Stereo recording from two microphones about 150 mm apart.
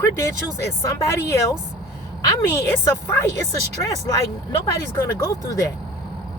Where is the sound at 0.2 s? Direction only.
20° left (ahead or behind).